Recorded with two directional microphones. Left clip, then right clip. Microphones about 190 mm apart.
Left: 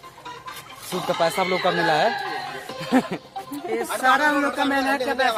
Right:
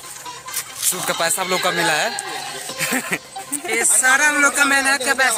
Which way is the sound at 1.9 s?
10° right (ahead or behind).